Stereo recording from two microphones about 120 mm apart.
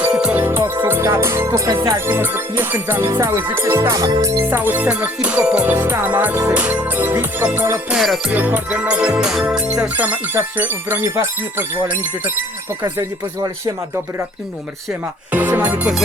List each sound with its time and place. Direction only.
0.0 s music: 5° right (ahead or behind)
0.3 s music: 20° right (ahead or behind)
4.4 s music: 15° right (ahead or behind)
7.9 s music: centre (ahead or behind)
8.3 s music: 15° right (ahead or behind)
12.8 s speech: 30° right (ahead or behind)
15.3 s music: 15° right (ahead or behind)